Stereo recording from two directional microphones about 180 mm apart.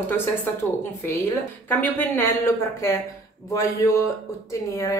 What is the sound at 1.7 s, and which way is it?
Speech, 10° left (ahead or behind).